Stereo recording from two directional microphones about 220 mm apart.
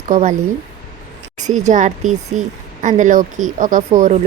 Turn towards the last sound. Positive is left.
turn(degrees=-35)  # may be behind; listen again after turning